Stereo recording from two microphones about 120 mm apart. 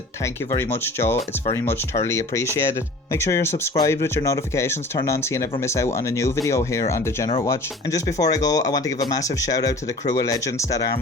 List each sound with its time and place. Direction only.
0.5 s speech: 20° left (ahead or behind)